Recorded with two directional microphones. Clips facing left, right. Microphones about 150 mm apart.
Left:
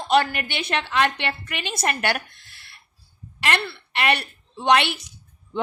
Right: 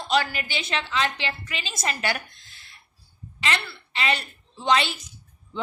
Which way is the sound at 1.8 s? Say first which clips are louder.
Left 3 dB; 65° left (ahead or behind).